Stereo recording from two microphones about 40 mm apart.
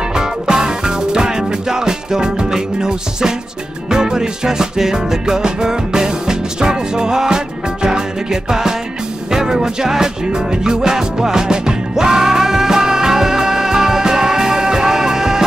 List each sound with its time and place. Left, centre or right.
0.1 s music: centre